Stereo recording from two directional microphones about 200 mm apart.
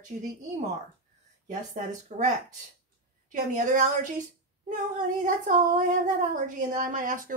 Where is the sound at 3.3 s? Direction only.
40° right (ahead or behind).